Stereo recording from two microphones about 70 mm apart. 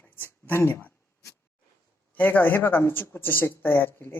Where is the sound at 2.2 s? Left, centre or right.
Left.